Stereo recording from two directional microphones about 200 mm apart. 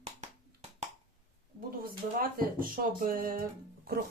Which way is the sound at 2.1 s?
45° right (ahead or behind).